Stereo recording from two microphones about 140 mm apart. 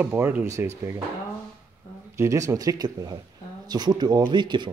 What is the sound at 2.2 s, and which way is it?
Speech, 20° right (ahead or behind).